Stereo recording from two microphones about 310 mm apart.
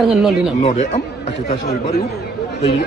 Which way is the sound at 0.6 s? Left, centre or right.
Left.